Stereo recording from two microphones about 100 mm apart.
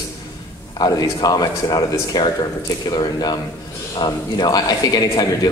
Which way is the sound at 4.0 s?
45° left (ahead or behind).